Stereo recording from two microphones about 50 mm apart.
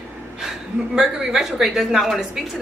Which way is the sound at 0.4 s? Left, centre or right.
Centre.